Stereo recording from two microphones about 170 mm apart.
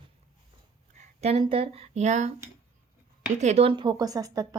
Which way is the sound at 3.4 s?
40° right (ahead or behind).